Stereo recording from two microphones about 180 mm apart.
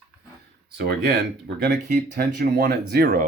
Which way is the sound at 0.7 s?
65° right (ahead or behind).